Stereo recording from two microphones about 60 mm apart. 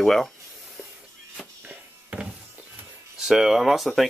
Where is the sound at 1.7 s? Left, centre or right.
Centre.